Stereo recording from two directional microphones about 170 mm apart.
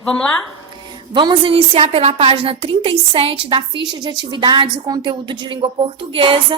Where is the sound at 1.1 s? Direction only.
30° right (ahead or behind).